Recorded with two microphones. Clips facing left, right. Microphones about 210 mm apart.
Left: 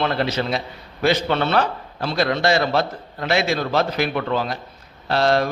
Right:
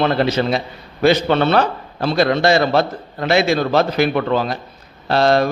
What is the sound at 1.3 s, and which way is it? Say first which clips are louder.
Speech: right 5 dB; 70° right (ahead or behind).